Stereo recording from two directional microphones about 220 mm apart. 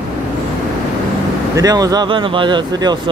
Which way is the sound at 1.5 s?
15° right (ahead or behind).